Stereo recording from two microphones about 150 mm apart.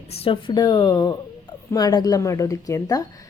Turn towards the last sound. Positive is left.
turn(degrees=25)  # may be behind; listen again after turning